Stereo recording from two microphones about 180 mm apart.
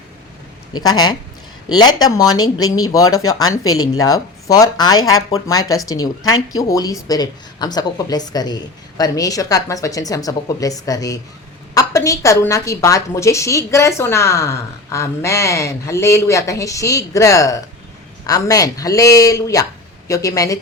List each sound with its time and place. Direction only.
0.7 s a woman's voice: 20° left (ahead or behind)